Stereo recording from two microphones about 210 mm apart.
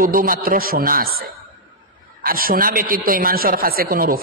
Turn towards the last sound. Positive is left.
turn(degrees=-45)  # may be behind; listen again after turning